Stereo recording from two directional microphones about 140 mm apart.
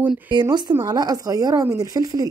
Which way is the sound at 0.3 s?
30° right (ahead or behind).